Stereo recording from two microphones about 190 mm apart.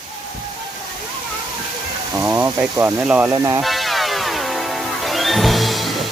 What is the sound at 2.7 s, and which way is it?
Speech, 10° right (ahead or behind).